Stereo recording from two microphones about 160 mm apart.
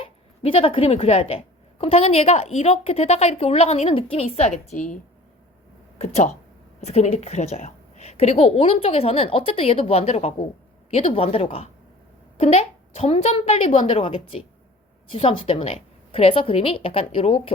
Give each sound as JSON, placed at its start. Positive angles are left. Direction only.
{"t": 0.0, "sound": "a woman's voice", "side_deg": 35}
{"t": 6.0, "sound": "a woman's voice", "side_deg": 45}